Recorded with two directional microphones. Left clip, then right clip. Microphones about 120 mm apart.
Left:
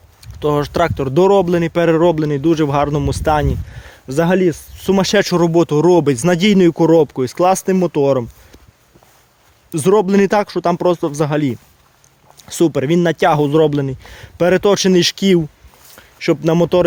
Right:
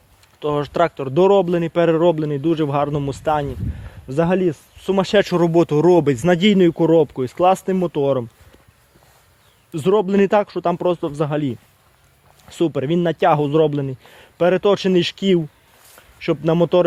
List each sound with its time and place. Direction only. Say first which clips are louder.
0.2 s speech: left 5 dB; 30° left (ahead or behind)
5.4 s speech: left 2 dB; 10° left (ahead or behind)
6.2 s speech: left 2 dB; 25° left (ahead or behind)
9.7 s speech: left 4 dB; 30° left (ahead or behind)